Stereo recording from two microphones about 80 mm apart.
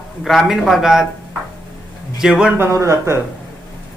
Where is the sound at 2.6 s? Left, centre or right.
Right.